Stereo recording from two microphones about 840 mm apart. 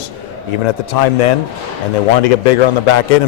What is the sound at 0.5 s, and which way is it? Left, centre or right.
A man's voice, left.